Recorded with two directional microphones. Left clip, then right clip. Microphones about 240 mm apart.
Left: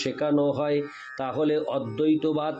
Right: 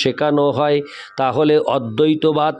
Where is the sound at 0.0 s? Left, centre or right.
Right.